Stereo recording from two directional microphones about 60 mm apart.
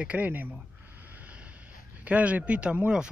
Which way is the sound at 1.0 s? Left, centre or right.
Right.